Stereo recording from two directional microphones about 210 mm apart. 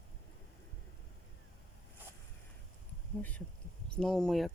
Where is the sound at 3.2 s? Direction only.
10° left (ahead or behind).